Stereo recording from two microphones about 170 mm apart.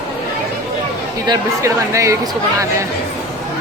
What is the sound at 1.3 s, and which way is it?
Speech, 15° right (ahead or behind).